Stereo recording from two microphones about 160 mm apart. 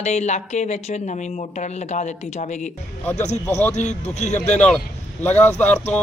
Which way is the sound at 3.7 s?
45° left (ahead or behind).